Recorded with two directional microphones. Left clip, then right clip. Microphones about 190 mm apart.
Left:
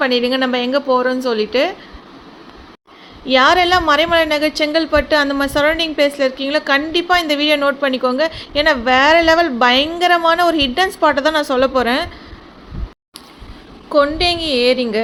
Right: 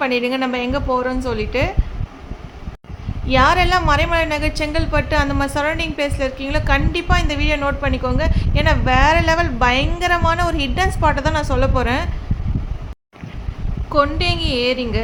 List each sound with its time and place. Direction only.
0.0 s a woman's voice: 10° left (ahead or behind)
3.2 s a woman's voice: 15° left (ahead or behind)
13.9 s a woman's voice: 15° left (ahead or behind)